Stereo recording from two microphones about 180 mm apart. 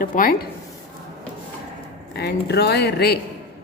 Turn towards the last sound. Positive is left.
turn(degrees=60)  # may be behind; listen again after turning